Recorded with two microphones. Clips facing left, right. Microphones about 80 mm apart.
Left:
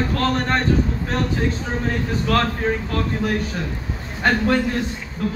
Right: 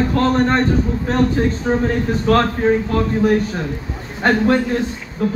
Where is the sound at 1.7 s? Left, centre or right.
Right.